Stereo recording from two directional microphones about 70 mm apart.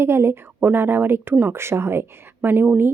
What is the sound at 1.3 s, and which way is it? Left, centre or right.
Speech, right.